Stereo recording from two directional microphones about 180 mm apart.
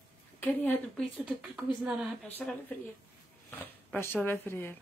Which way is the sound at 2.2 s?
10° left (ahead or behind).